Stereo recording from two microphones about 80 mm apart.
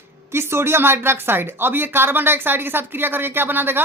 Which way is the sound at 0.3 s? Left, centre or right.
Right.